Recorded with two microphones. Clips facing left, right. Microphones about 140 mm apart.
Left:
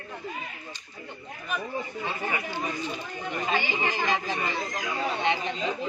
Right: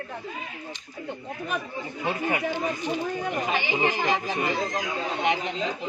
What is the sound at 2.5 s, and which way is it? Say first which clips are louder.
Speech: right 4 dB; 15° right (ahead or behind).